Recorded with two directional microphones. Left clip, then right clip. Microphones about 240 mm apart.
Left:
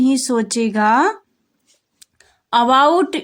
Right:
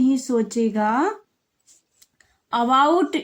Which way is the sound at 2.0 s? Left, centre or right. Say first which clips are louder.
Left 7 dB; left.